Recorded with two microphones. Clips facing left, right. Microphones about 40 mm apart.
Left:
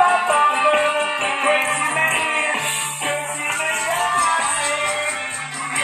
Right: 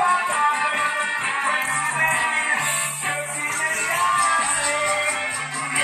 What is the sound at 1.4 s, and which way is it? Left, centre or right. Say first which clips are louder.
Music: left 7 dB; left.